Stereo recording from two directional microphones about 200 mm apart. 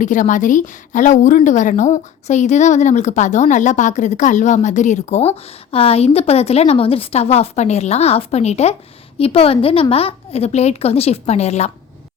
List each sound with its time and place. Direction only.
0.0 s a woman's voice: 40° left (ahead or behind)